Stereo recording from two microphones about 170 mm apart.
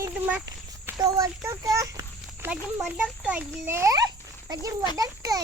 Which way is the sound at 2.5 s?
10° right (ahead or behind).